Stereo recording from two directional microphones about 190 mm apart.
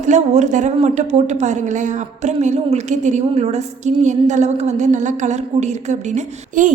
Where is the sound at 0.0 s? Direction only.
40° right (ahead or behind).